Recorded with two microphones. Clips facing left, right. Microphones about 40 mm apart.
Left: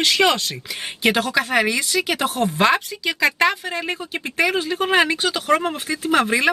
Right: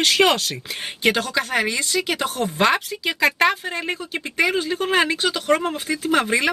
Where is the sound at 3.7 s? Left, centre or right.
Centre.